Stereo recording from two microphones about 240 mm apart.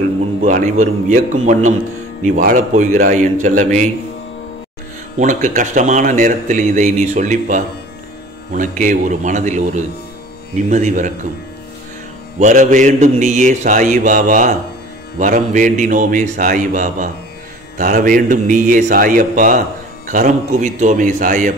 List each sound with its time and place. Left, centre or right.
0.4 s speech: right
5.1 s speech: right
12.4 s speech: right